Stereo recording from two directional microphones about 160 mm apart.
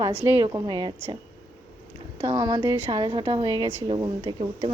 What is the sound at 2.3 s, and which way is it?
A woman's voice, 25° right (ahead or behind).